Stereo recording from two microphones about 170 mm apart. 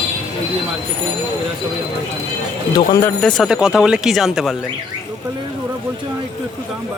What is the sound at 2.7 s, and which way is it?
Speech, 20° left (ahead or behind).